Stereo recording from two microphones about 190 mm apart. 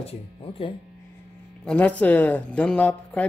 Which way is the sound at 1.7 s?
5° left (ahead or behind).